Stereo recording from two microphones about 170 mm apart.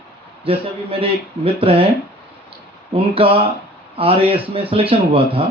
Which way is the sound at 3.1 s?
30° right (ahead or behind).